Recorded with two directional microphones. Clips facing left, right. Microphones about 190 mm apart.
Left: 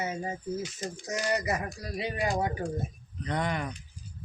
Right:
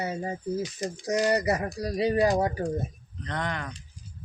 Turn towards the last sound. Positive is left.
turn(degrees=10)  # may be behind; listen again after turning